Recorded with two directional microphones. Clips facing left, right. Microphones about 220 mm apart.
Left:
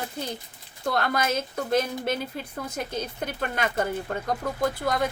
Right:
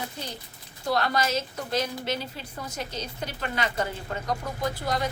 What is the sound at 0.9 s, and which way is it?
A woman's voice, 55° left (ahead or behind).